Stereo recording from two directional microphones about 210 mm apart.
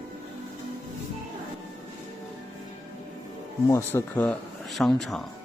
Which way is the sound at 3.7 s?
10° left (ahead or behind).